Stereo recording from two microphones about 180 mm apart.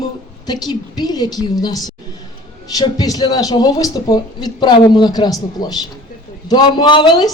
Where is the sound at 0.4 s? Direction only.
20° left (ahead or behind).